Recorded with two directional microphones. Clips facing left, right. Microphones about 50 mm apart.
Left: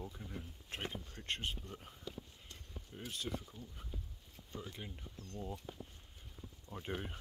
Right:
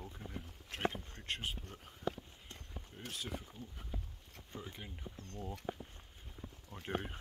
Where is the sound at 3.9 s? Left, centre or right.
Right.